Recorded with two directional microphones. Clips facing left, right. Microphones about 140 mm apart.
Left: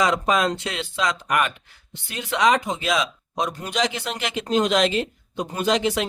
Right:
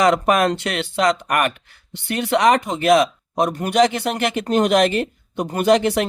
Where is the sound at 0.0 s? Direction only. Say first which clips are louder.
Right 5 dB; 65° right (ahead or behind).